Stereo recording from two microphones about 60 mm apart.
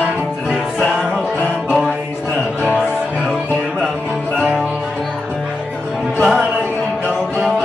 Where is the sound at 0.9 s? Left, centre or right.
Centre.